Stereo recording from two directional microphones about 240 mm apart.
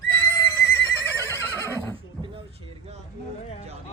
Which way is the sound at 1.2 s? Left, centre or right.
Centre.